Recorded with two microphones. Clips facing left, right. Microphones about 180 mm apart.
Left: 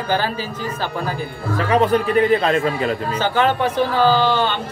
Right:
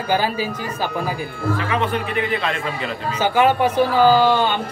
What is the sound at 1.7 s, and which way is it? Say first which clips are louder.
A man's voice: left 6 dB; 40° left (ahead or behind).